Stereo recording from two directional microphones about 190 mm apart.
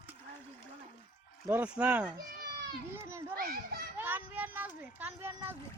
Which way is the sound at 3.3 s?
50° right (ahead or behind).